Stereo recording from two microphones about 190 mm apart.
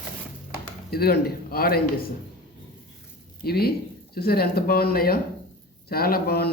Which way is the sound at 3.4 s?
55° left (ahead or behind).